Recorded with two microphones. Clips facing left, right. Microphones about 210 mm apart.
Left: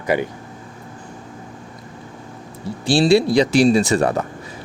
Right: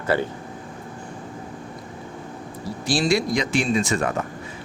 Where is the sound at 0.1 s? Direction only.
15° left (ahead or behind).